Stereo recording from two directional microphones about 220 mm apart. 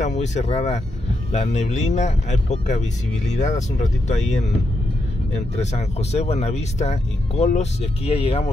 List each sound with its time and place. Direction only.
0.0 s speech: 30° left (ahead or behind)
5.6 s speech: 30° left (ahead or behind)